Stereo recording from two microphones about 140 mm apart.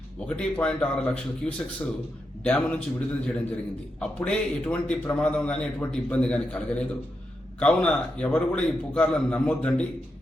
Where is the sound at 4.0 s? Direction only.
10° left (ahead or behind).